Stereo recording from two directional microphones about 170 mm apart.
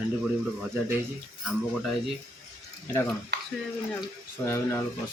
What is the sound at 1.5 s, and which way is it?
Speech, centre (ahead or behind).